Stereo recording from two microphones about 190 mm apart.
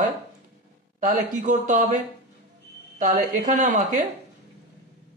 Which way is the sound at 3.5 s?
40° right (ahead or behind).